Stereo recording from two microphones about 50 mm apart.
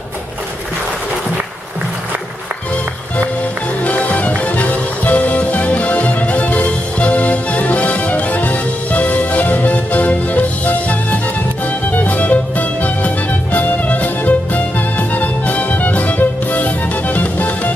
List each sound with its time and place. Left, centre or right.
3.8 s music: left